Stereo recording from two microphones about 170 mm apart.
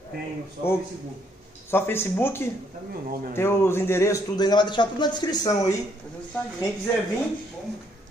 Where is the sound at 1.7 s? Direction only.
15° left (ahead or behind).